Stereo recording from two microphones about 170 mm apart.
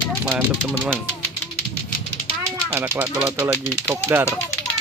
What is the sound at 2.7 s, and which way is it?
Speech, 10° right (ahead or behind).